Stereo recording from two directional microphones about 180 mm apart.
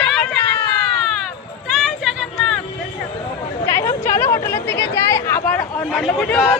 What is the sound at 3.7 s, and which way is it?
Chatter, 15° left (ahead or behind).